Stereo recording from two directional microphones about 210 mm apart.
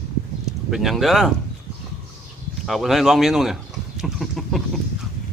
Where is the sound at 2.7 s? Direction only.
Centre (ahead or behind).